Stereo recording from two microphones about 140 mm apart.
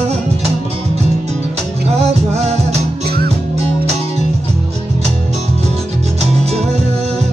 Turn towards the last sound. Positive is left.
turn(degrees=-50)  # may be behind; listen again after turning